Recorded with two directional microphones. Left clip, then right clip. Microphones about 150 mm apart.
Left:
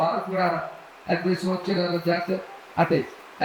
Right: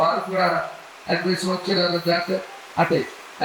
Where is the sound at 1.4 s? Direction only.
5° left (ahead or behind).